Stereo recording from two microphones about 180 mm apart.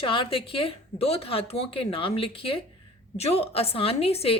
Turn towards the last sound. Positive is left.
turn(degrees=35)  # may be behind; listen again after turning